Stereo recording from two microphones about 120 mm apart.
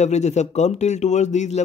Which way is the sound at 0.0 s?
70° left (ahead or behind).